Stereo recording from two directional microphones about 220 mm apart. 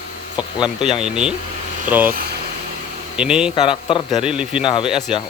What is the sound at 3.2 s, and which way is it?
Speech, 5° right (ahead or behind).